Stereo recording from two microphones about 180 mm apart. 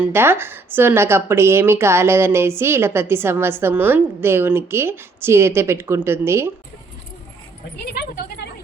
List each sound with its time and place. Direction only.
0.0 s a woman's voice: 15° right (ahead or behind)
7.9 s speech: 70° left (ahead or behind)